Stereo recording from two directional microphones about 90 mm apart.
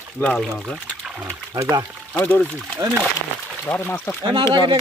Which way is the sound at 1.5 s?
40° right (ahead or behind).